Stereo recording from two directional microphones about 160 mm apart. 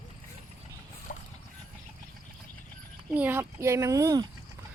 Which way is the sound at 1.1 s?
55° left (ahead or behind).